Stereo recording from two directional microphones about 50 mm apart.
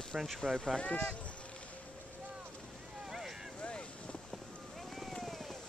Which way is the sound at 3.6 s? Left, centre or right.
Left.